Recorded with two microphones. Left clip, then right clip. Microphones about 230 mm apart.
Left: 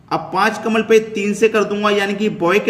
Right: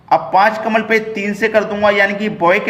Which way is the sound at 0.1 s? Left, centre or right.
Centre.